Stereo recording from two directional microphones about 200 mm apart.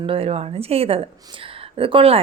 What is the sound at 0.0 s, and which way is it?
A woman's voice, 30° right (ahead or behind).